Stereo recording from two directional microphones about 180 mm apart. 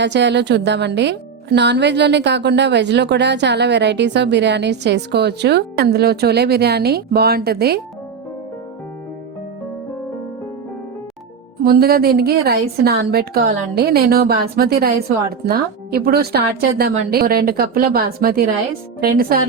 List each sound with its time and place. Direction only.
0.0 s speech: 75° right (ahead or behind)
11.6 s a woman's voice: 55° right (ahead or behind)